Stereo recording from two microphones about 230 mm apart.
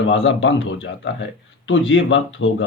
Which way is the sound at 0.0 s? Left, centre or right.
Left.